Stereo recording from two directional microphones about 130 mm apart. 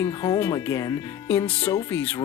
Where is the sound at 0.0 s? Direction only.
25° left (ahead or behind).